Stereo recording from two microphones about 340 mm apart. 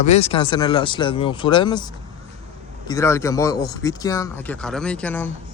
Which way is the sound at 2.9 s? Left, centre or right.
Centre.